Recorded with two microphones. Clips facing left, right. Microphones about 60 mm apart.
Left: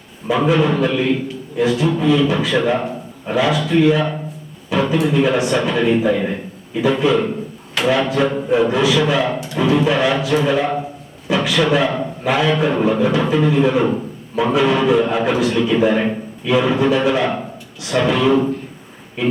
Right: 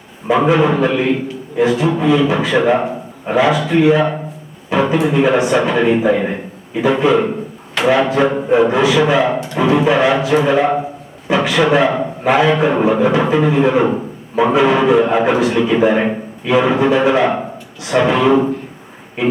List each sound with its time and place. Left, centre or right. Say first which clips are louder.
0.3 s a man's voice: right 3 dB; right
4.7 s a sound: right 3 dB; right
4.9 s a man's voice: right 2 dB; centre
5.7 s a man's voice: right 3 dB; centre
8.9 s a man's voice: right 3 dB; centre